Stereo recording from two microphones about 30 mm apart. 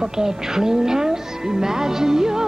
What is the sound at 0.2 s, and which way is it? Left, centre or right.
Speech, centre.